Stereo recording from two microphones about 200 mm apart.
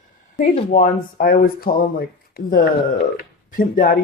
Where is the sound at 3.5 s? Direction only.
40° left (ahead or behind).